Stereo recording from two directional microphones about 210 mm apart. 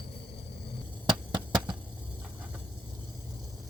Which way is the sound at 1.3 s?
20° right (ahead or behind).